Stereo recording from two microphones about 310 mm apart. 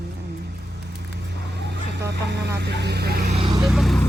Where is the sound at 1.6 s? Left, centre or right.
Right.